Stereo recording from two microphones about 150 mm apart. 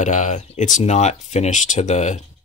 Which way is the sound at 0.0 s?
55° left (ahead or behind).